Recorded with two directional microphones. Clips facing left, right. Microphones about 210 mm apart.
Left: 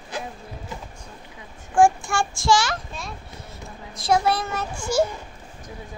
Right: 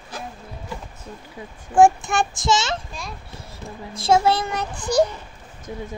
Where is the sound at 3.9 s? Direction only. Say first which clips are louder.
Right 3 dB; 25° right (ahead or behind).